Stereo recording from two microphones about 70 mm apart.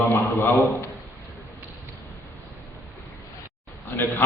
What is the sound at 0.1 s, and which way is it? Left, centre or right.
Speech, left.